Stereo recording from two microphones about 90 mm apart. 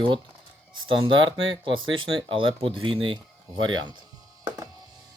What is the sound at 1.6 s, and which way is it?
Speech, 70° right (ahead or behind).